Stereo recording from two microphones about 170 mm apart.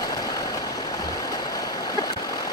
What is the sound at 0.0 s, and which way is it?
Vehicle, 20° left (ahead or behind).